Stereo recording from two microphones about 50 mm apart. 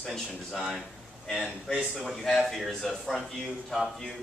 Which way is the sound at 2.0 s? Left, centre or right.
Centre.